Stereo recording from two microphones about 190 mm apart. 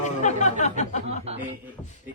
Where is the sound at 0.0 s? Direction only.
40° left (ahead or behind).